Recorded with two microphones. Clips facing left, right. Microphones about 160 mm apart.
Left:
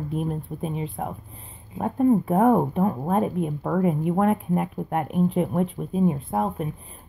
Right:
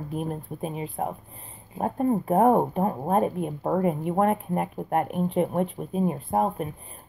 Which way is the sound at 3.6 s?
30° right (ahead or behind).